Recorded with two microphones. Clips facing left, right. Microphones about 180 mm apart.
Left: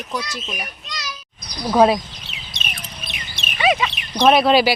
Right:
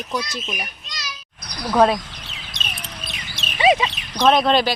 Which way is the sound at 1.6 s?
5° left (ahead or behind).